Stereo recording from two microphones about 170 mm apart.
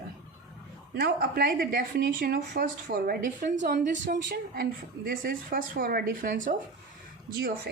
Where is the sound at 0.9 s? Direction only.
65° right (ahead or behind); by 6.6 s 50° right (ahead or behind).